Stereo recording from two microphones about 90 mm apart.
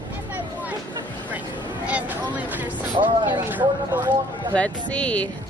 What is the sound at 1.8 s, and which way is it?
Speech, 15° right (ahead or behind).